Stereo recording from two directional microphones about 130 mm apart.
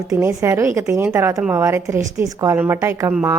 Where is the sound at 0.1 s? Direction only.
20° right (ahead or behind).